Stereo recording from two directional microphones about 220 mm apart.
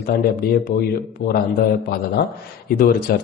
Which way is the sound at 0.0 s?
40° left (ahead or behind).